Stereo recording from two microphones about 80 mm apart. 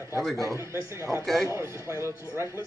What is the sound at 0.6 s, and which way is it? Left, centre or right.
A man's voice, right.